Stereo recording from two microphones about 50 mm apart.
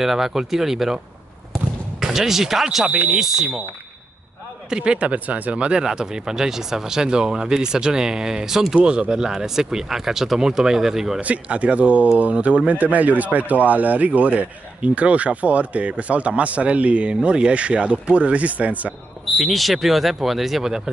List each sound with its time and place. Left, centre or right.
0.0 s speech: centre
2.0 s speech: centre
4.6 s speech: centre
4.9 s speech: right; by 8.7 s centre
8.7 s speech: right; by 11.1 s centre
11.1 s speech: right
19.3 s speech: centre